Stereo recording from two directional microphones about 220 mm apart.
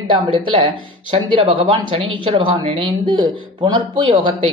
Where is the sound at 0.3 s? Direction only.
25° right (ahead or behind).